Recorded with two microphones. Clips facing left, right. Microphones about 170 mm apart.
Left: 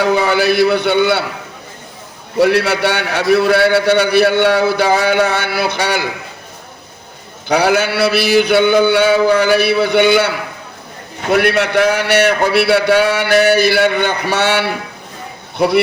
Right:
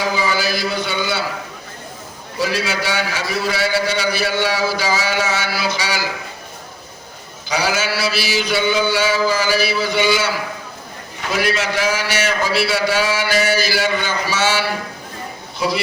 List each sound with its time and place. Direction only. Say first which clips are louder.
0.0 s a man's voice: left 7 dB; 60° left (ahead or behind)
2.4 s a man's voice: left 9 dB; 60° left (ahead or behind)
7.4 s a man's voice: left 7 dB; 60° left (ahead or behind)